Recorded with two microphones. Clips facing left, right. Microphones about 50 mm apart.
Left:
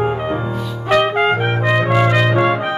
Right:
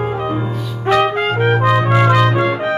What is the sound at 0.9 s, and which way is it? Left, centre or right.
Trumpet, centre.